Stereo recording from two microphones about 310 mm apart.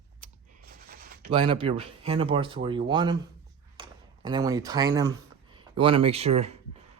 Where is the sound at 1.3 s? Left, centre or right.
Centre.